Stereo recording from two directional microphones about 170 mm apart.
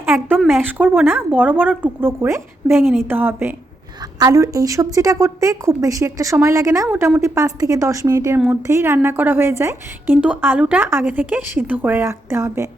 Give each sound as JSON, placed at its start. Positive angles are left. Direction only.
{"t": 0.0, "sound": "a woman's voice", "side_deg": -15}